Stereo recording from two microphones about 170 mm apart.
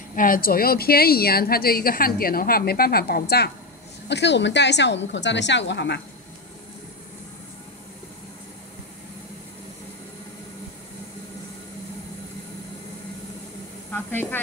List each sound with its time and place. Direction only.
0.1 s a woman's voice: 55° left (ahead or behind)
4.1 s a woman's voice: 90° left
13.9 s speech: 10° left (ahead or behind)